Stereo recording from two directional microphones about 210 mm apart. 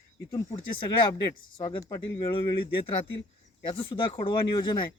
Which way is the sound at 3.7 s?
25° left (ahead or behind).